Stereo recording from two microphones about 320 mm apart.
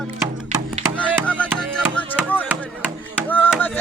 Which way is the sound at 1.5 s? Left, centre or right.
Centre.